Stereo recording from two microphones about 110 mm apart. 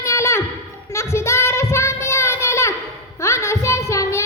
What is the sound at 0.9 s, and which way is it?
Child singing, 25° left (ahead or behind).